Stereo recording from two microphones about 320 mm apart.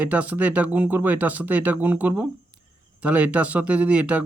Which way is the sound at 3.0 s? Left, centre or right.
Right.